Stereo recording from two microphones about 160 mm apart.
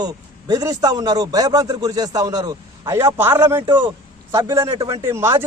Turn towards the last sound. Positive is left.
turn(degrees=-15)  # may be behind; listen again after turning